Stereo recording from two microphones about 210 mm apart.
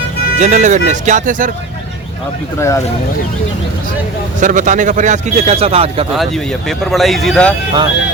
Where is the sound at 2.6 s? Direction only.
15° left (ahead or behind).